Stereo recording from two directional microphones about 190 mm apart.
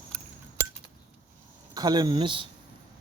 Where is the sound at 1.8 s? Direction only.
20° right (ahead or behind).